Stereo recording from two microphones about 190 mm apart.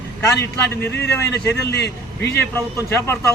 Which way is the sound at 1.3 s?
60° left (ahead or behind).